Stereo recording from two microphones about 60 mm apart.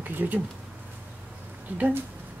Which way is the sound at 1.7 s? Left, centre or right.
Right.